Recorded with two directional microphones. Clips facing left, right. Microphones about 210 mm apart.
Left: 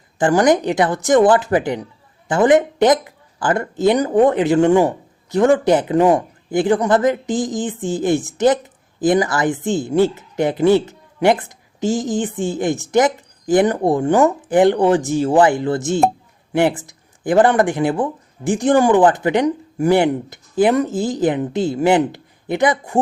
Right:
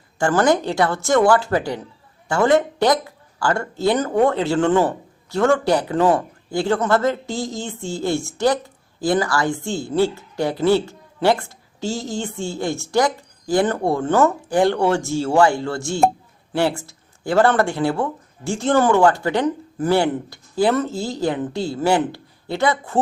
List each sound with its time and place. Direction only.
0.2 s speech: 15° left (ahead or behind)